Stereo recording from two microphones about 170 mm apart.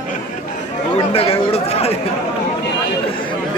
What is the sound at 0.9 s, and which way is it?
Chatter, 35° left (ahead or behind).